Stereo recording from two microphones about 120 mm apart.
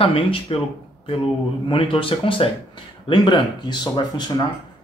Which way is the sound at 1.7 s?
45° left (ahead or behind).